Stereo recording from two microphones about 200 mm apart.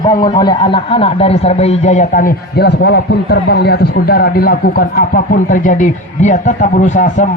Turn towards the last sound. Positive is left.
turn(degrees=40)  # may be behind; listen again after turning